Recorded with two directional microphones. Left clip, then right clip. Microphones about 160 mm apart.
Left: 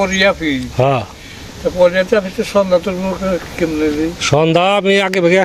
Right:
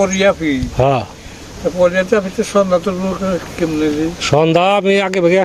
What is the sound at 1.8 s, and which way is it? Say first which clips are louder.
Speech: left 1 dB; 90° right.